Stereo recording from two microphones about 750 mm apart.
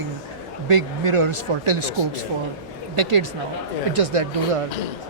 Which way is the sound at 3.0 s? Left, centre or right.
Right.